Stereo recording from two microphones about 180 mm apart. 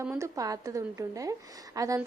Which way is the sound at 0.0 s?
15° right (ahead or behind).